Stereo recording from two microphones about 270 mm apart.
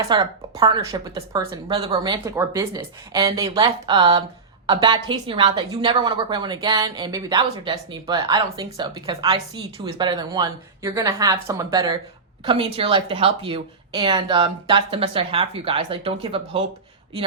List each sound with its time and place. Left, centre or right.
0.0 s a woman's voice: centre